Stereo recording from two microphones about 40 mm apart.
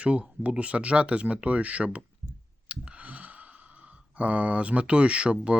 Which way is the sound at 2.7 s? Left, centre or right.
Right.